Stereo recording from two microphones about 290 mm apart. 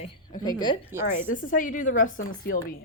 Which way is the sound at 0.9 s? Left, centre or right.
Centre.